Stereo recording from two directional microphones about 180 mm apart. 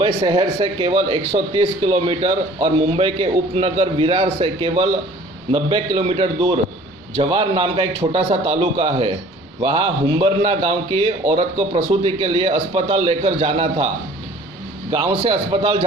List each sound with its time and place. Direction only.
0.0 s a man's voice: 25° right (ahead or behind)
15.2 s a man's voice: 30° right (ahead or behind)